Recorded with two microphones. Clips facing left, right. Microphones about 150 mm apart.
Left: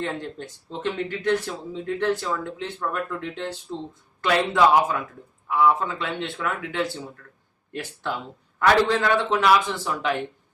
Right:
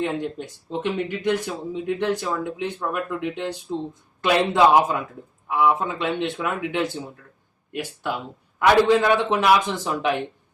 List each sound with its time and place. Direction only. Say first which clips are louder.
0.0 s speech: right 4 dB; 15° right (ahead or behind)